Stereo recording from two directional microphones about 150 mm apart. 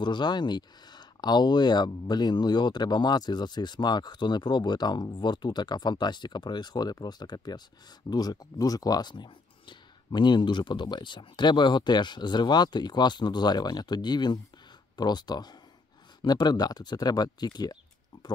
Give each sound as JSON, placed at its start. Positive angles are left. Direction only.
{"t": 0.0, "sound": "speech", "side_deg": 30}